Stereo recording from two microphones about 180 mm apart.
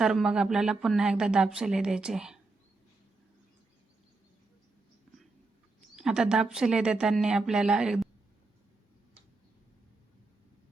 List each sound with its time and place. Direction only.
0.0 s a woman's voice: centre (ahead or behind)
5.1 s a sound: 5° right (ahead or behind)
6.0 s a woman's voice: 5° right (ahead or behind)